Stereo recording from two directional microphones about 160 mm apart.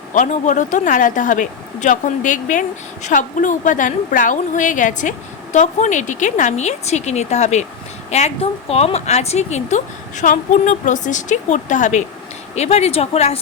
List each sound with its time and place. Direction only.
0.1 s speech: 50° left (ahead or behind)